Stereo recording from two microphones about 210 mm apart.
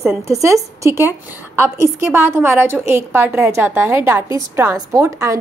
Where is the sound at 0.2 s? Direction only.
15° right (ahead or behind).